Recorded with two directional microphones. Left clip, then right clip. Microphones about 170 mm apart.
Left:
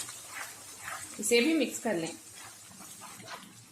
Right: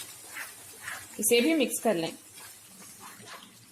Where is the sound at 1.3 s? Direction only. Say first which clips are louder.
Right 2 dB; 45° right (ahead or behind).